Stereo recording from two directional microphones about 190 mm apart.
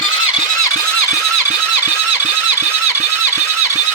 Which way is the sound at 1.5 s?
10° right (ahead or behind).